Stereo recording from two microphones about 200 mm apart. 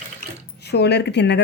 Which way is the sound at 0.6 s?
55° left (ahead or behind).